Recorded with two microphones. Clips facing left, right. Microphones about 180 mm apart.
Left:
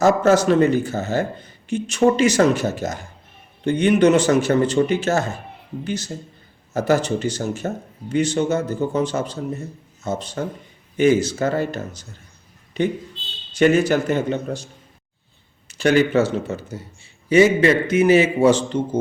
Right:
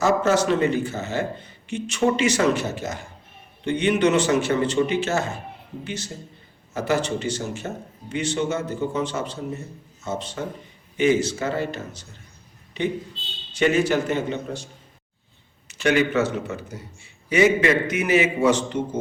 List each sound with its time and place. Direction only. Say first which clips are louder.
0.0 s a man's voice: left 4 dB; 40° left (ahead or behind)
13.6 s a man's voice: left 4 dB; 40° left (ahead or behind)